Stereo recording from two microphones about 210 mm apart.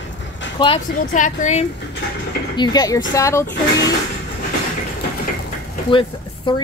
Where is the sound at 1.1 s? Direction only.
35° left (ahead or behind).